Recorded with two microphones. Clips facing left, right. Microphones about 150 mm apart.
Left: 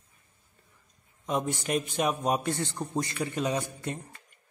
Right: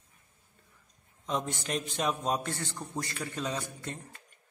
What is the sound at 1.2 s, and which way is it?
A man's voice, 10° left (ahead or behind).